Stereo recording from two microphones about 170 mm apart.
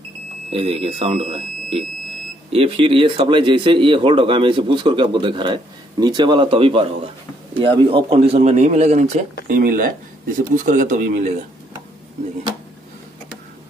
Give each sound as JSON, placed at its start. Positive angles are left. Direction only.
{"t": 0.5, "sound": "speech", "side_deg": -35}
{"t": 9.5, "sound": "speech", "side_deg": -55}